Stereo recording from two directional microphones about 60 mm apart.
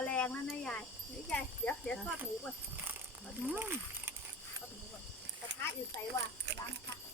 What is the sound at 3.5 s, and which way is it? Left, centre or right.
Speech, right.